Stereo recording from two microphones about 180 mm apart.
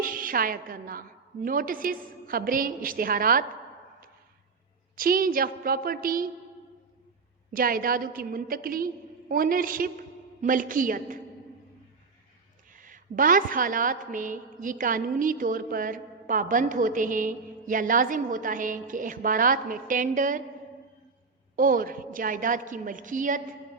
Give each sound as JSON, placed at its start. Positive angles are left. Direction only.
{"t": 0.0, "sound": "a woman's voice", "side_deg": -50}
{"t": 4.9, "sound": "a woman's voice", "side_deg": -50}
{"t": 7.5, "sound": "a woman's voice", "side_deg": -50}
{"t": 12.7, "sound": "a woman's voice", "side_deg": -50}
{"t": 21.5, "sound": "a woman's voice", "side_deg": -50}